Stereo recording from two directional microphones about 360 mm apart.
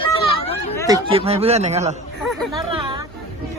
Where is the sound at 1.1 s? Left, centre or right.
Centre.